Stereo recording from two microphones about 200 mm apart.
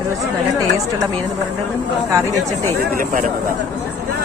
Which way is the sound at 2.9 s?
45° right (ahead or behind).